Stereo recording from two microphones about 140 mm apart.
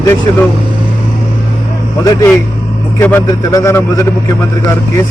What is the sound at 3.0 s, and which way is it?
A man's voice, 15° left (ahead or behind).